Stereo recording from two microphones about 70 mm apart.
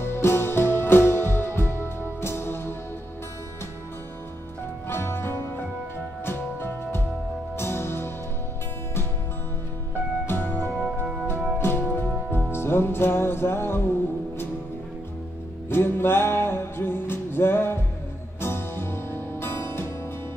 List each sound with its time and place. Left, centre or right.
0.0 s music: left
4.8 s music: left
10.2 s music: left
15.7 s music: left